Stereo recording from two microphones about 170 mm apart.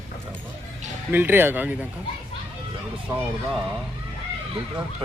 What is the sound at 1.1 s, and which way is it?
Speech, 10° right (ahead or behind).